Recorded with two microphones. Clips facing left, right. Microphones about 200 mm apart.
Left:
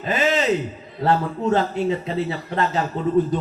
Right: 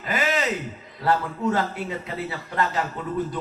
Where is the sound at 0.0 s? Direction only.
25° left (ahead or behind).